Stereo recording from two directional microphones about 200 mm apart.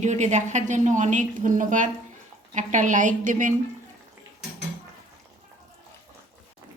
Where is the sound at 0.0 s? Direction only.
35° right (ahead or behind).